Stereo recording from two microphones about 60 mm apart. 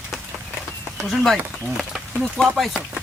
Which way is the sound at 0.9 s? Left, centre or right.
Centre.